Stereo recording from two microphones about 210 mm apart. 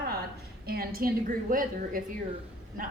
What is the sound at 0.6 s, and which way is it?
A woman's voice, 45° right (ahead or behind).